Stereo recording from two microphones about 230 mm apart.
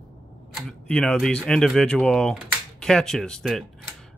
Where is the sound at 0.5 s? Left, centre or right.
Centre.